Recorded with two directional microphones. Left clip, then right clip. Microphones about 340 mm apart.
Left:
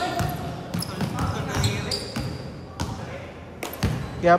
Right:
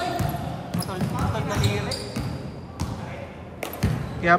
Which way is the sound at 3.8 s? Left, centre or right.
Centre.